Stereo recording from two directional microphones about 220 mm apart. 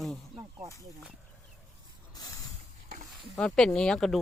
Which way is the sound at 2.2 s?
15° left (ahead or behind).